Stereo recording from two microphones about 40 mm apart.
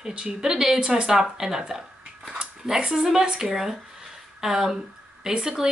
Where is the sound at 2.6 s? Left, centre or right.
Centre.